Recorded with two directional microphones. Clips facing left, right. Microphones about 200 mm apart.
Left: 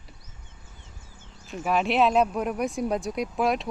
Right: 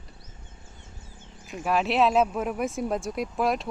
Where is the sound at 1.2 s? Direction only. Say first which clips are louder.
Right 2 dB; 15° right (ahead or behind).